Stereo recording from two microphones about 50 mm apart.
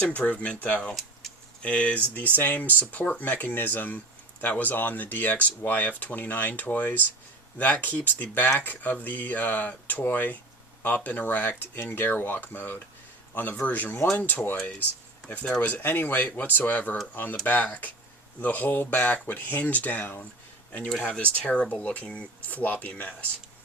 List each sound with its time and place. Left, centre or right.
0.0 s speech: left
15.8 s speech: left
16.2 s speech: left
20.9 s speech: centre
21.2 s speech: left
22.5 s speech: left